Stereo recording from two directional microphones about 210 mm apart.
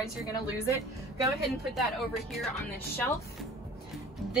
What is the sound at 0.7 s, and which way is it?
Speech, 15° right (ahead or behind).